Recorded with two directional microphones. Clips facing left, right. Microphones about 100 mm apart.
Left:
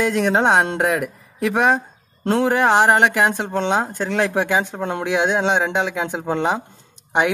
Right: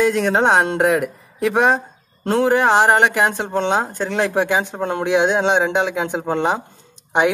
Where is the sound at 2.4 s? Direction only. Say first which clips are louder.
Right 2 dB; 15° right (ahead or behind).